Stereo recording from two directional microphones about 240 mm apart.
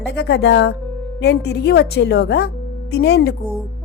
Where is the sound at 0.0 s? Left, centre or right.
Left.